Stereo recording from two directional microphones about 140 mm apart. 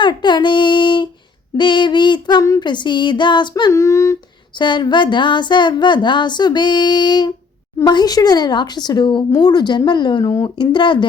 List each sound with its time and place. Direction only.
0.0 s child singing: 35° left (ahead or behind)
1.5 s a woman's voice: 35° left (ahead or behind)
3.7 s speech: 20° left (ahead or behind)
4.5 s a woman's voice: 35° left (ahead or behind)